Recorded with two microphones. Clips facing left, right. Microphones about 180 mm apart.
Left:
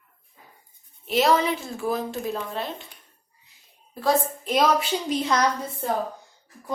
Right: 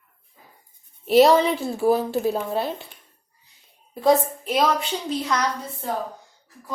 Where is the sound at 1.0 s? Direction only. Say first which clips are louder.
Right 6 dB; 35° right (ahead or behind).